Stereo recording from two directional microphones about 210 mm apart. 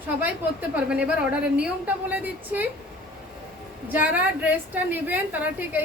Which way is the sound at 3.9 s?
10° right (ahead or behind).